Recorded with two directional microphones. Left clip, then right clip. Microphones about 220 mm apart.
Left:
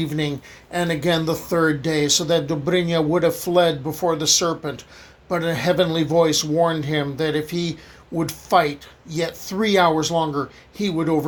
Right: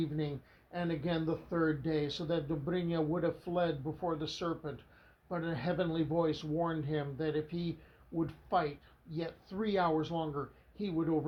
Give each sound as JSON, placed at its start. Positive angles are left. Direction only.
{"t": 0.2, "sound": "speech", "side_deg": 35}